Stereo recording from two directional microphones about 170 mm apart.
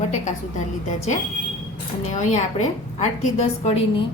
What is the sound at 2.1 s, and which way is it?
A woman's voice, 45° left (ahead or behind).